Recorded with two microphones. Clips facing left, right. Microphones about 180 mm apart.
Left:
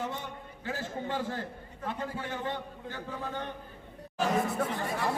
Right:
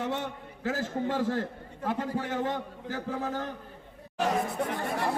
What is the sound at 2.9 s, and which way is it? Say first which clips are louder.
Speech: right 7 dB; 85° right.